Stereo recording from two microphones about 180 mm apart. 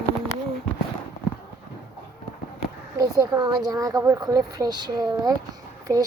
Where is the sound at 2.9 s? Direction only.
20° right (ahead or behind).